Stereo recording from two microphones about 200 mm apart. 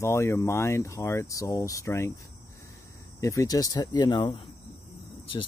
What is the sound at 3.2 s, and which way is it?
Speech, 15° left (ahead or behind).